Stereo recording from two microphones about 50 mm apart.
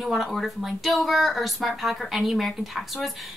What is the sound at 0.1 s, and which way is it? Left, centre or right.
A woman's voice, centre.